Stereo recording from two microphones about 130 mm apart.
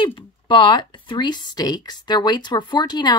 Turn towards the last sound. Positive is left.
turn(degrees=35)  # may be behind; listen again after turning